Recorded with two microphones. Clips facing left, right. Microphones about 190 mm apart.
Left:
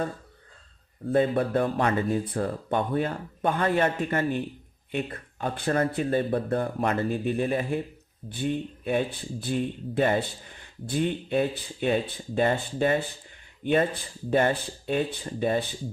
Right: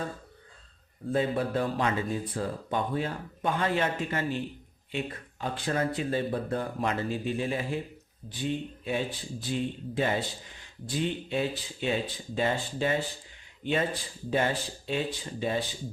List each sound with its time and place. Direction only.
1.1 s speech: 55° left (ahead or behind)